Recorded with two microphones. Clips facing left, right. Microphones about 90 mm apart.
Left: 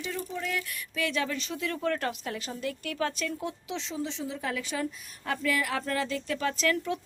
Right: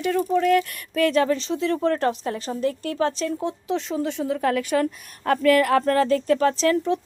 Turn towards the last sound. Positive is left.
turn(degrees=-35)  # may be behind; listen again after turning